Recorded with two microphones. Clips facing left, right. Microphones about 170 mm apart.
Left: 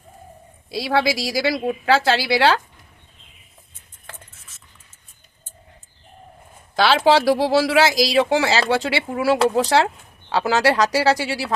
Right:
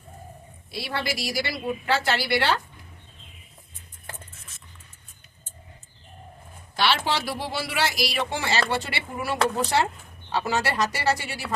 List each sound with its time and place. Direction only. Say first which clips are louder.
0.7 s speech: left 10 dB; 90° left
6.8 s speech: left 10 dB; 90° left